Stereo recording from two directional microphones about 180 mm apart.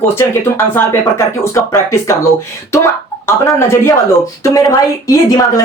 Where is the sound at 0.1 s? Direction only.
15° left (ahead or behind).